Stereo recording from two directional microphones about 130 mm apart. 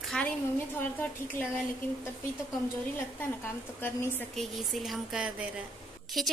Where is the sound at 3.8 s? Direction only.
15° left (ahead or behind).